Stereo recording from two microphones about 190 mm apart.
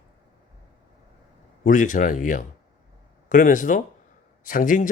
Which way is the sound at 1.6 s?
45° left (ahead or behind).